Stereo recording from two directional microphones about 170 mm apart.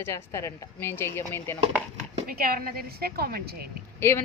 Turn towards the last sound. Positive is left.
turn(degrees=15)  # may be behind; listen again after turning